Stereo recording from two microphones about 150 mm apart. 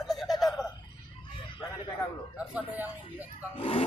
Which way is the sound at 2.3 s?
10° right (ahead or behind).